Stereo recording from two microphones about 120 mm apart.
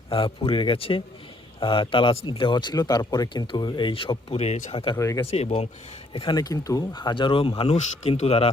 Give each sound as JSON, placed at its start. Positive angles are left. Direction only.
{"t": 0.1, "sound": "speech", "side_deg": 45}
{"t": 4.7, "sound": "speech", "side_deg": 50}
{"t": 4.9, "sound": "speech", "side_deg": 25}
{"t": 5.2, "sound": "speech", "side_deg": 65}
{"t": 6.1, "sound": "speech", "side_deg": 35}
{"t": 7.8, "sound": "speech", "side_deg": 65}